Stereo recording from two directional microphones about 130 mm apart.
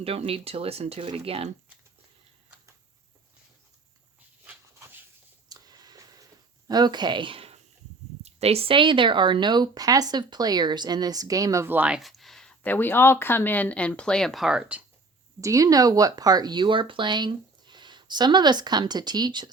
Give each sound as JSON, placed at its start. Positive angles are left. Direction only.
{"t": 0.0, "sound": "speech", "side_deg": -50}
{"t": 4.4, "sound": "dog", "side_deg": -15}
{"t": 5.5, "sound": "a sound", "side_deg": -30}
{"t": 6.7, "sound": "speech", "side_deg": -35}
{"t": 11.9, "sound": "speech", "side_deg": 0}
{"t": 15.4, "sound": "speech", "side_deg": -25}